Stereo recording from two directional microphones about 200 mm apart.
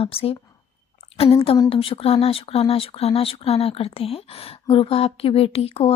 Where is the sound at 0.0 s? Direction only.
30° left (ahead or behind).